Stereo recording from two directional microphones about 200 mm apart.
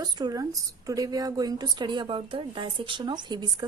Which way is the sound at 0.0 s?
20° right (ahead or behind).